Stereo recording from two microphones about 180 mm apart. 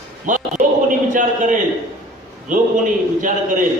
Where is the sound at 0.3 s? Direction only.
45° right (ahead or behind).